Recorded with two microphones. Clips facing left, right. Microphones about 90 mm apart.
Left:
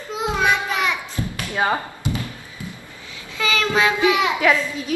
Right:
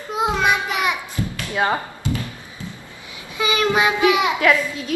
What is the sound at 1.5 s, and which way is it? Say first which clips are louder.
Speech: even; centre (ahead or behind).